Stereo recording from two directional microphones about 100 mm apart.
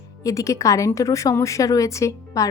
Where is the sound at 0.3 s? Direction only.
30° left (ahead or behind).